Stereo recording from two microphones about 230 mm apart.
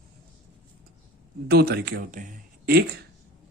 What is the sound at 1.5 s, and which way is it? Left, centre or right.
Speech, right.